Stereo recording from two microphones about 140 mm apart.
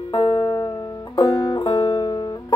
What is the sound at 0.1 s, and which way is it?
Music, 35° left (ahead or behind).